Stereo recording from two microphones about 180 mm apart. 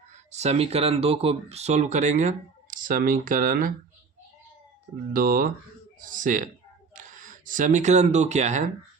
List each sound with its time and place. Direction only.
0.3 s speech: 40° right (ahead or behind)
5.1 s speech: 50° right (ahead or behind)